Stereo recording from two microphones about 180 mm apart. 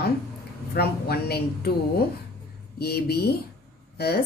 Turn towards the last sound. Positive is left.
turn(degrees=60)  # may be behind; listen again after turning